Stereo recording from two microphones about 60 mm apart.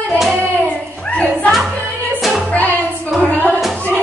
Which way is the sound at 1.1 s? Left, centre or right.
Left.